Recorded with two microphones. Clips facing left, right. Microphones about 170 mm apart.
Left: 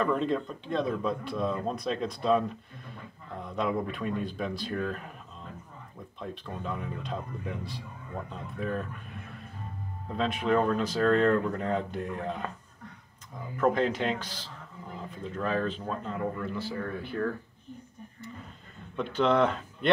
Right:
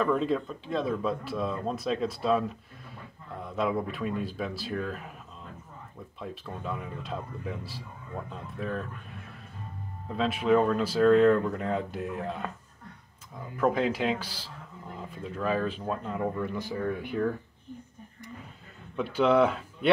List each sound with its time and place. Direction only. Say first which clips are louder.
0.0 s speech: right 1 dB; centre (ahead or behind)
6.1 s speech: left 1 dB; 5° right (ahead or behind)
10.0 s speech: right 2 dB; centre (ahead or behind)
13.6 s speech: even; 5° right (ahead or behind)
18.9 s speech: right 2 dB; 10° right (ahead or behind)